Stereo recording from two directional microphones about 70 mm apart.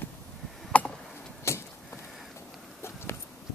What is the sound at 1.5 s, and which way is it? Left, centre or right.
Chop, left.